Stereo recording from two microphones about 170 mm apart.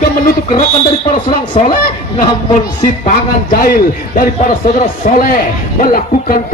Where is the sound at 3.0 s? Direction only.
55° left (ahead or behind).